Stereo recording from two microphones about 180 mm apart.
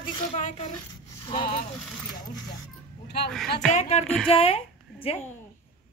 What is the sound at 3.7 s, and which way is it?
Speech, 35° left (ahead or behind).